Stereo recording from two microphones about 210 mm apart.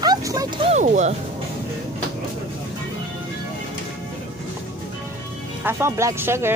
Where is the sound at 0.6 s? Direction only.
35° right (ahead or behind).